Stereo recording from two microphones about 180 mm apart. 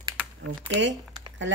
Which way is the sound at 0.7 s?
85° right.